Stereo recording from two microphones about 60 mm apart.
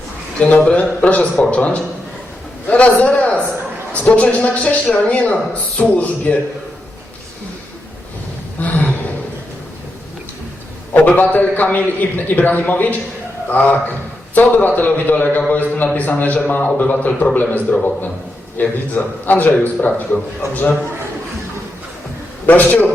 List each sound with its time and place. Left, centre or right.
0.3 s a man's voice: left
8.6 s a sound: left
10.9 s a man's voice: left
22.4 s a man's voice: left